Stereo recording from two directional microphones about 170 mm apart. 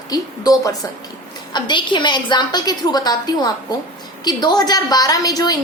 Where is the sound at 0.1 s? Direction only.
20° left (ahead or behind).